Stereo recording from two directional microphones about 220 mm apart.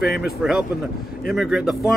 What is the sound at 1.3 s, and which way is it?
Speech, 5° right (ahead or behind).